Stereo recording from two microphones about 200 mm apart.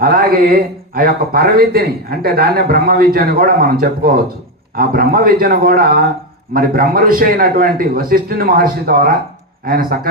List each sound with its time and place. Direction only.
0.0 s a man's voice: 50° right (ahead or behind)